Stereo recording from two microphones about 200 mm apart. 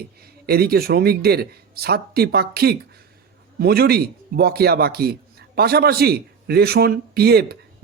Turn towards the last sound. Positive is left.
turn(degrees=-50)  # may be behind; listen again after turning